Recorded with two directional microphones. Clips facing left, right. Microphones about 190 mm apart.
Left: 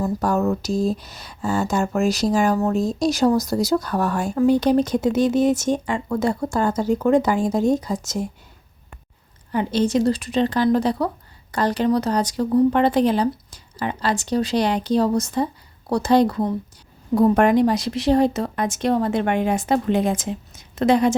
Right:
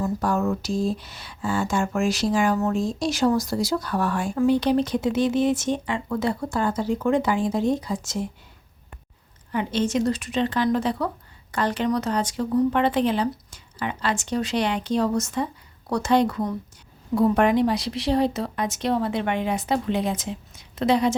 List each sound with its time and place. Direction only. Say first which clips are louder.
0.0 s speech: left 3 dB; 40° left (ahead or behind)
9.5 s speech: left 4 dB; 35° left (ahead or behind)
17.2 s speech: left 3 dB; 45° left (ahead or behind)